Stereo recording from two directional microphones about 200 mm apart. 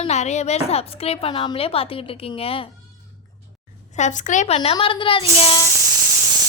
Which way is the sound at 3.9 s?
35° left (ahead or behind).